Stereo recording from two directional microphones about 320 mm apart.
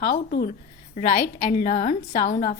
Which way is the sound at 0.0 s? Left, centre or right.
Left.